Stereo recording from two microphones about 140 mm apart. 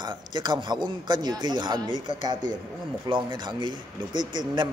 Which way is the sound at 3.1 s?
35° right (ahead or behind).